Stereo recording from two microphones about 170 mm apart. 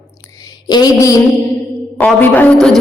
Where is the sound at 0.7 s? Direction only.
20° left (ahead or behind).